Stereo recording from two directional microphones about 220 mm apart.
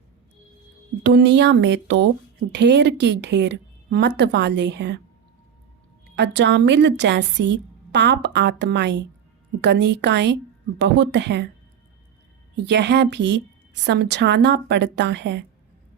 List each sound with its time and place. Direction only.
1.0 s a woman's voice: 50° right (ahead or behind)
6.1 s a woman's voice: 55° right (ahead or behind)
12.5 s a woman's voice: 50° right (ahead or behind)